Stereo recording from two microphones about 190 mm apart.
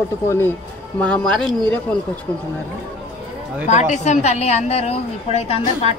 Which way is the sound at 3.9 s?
40° left (ahead or behind).